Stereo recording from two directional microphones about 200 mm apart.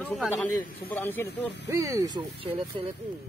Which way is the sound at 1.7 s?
15° right (ahead or behind).